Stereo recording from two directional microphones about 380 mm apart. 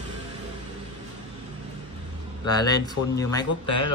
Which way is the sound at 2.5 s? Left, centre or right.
Centre.